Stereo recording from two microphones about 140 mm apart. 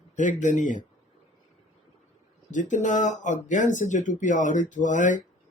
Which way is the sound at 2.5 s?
60° left (ahead or behind).